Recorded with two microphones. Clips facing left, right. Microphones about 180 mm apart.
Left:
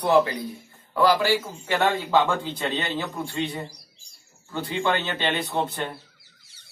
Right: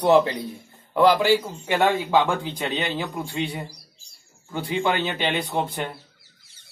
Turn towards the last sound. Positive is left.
turn(degrees=-10)  # may be behind; listen again after turning